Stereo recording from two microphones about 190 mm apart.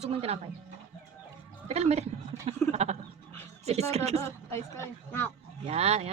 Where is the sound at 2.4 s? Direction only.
35° right (ahead or behind).